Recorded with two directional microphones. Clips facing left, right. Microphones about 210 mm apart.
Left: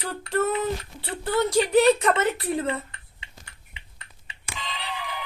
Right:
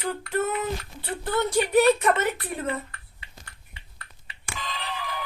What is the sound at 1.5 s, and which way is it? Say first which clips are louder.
Speech: left 1 dB; 35° left (ahead or behind).